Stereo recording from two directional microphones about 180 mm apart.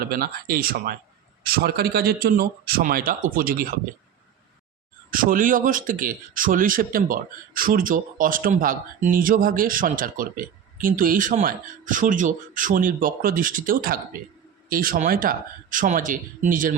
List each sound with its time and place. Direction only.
0.0 s a man's voice: 55° right (ahead or behind)
5.1 s speech: 50° right (ahead or behind)